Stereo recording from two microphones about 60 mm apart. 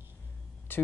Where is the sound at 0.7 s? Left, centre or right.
Left.